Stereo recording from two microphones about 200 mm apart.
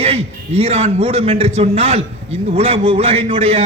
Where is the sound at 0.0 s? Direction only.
30° right (ahead or behind).